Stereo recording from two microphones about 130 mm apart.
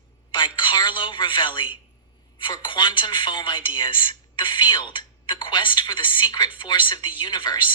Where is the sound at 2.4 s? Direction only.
35° left (ahead or behind).